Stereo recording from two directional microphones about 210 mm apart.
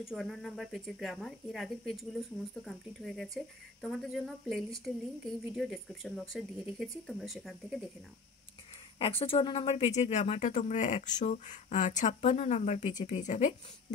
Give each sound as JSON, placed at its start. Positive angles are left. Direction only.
{"t": 0.0, "sound": "speech", "side_deg": 0}
{"t": 8.9, "sound": "speech", "side_deg": 25}